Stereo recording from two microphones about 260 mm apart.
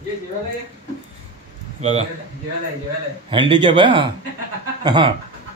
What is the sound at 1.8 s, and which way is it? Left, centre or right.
Speech, right.